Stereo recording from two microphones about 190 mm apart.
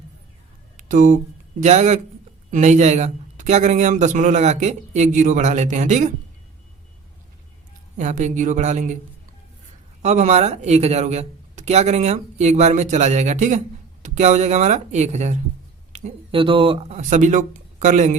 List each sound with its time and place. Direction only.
0.8 s a man's voice: 40° right (ahead or behind)
7.9 s a man's voice: 40° right (ahead or behind)
10.0 s a man's voice: 35° right (ahead or behind)